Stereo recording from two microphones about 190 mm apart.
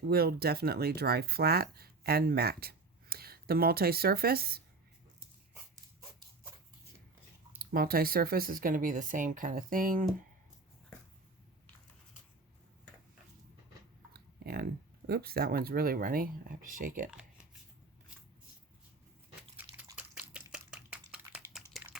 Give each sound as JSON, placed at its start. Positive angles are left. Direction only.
{"t": 0.1, "sound": "speech", "side_deg": -55}
{"t": 7.6, "sound": "speech", "side_deg": -50}
{"t": 14.1, "sound": "speech", "side_deg": -55}
{"t": 19.5, "sound": "a sound", "side_deg": -10}